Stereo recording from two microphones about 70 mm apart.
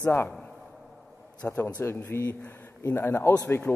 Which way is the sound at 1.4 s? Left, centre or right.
Left.